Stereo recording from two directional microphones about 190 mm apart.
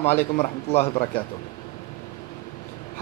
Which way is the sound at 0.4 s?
30° left (ahead or behind).